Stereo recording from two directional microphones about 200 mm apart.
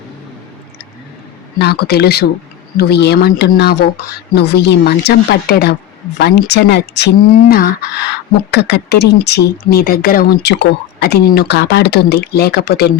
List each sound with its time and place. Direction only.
1.5 s speech: 55° left (ahead or behind)